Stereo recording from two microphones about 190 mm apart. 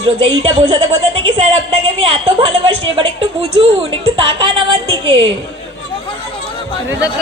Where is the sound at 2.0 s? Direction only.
30° right (ahead or behind).